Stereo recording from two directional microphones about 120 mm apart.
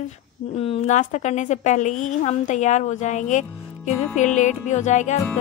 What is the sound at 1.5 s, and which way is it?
A woman's voice, 85° left.